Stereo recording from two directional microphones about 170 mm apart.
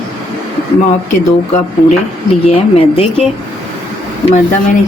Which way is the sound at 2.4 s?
35° left (ahead or behind).